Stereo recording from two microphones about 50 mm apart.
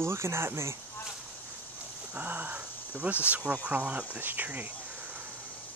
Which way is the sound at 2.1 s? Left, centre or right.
Right.